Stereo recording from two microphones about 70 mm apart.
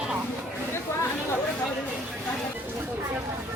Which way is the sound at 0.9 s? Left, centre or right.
Left.